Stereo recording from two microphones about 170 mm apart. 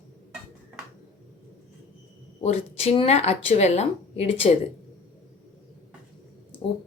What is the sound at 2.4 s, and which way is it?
A woman's voice, 40° left (ahead or behind).